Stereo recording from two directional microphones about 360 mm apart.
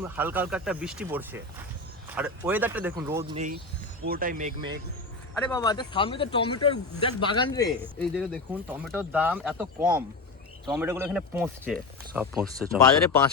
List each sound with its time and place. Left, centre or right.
0.0 s speech: centre
4.0 s speech: right
5.5 s speech: centre